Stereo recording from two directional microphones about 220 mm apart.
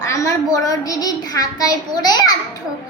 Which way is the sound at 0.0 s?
15° left (ahead or behind).